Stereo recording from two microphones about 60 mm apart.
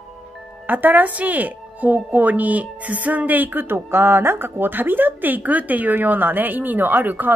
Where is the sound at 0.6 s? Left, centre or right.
Right.